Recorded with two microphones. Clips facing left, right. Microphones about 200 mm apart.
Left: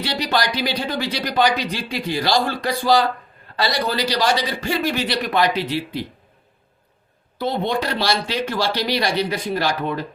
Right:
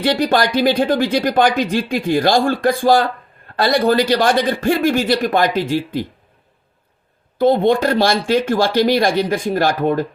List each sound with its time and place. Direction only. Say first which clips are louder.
0.0 s speech: right 7 dB; 50° right (ahead or behind)
7.3 s speech: right 9 dB; 50° right (ahead or behind)